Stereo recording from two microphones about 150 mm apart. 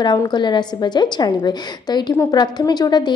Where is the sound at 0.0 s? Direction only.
30° left (ahead or behind).